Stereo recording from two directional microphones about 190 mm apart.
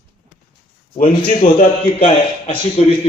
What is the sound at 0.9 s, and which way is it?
A man's voice, 45° left (ahead or behind).